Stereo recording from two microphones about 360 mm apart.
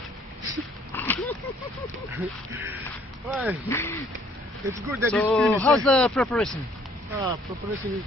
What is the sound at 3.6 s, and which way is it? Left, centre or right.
Speech, centre.